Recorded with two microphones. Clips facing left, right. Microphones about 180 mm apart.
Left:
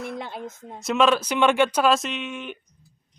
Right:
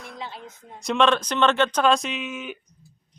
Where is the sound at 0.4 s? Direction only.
5° left (ahead or behind).